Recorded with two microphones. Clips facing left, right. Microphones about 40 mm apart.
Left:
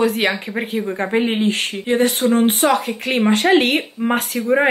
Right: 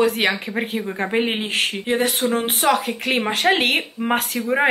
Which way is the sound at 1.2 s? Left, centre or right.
Centre.